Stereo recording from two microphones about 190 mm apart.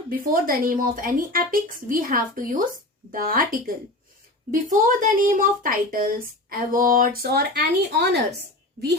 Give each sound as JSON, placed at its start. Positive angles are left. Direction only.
{"t": 0.3, "sound": "a woman's voice", "side_deg": -50}